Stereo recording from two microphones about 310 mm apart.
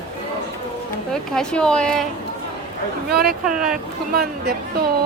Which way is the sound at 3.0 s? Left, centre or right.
Right.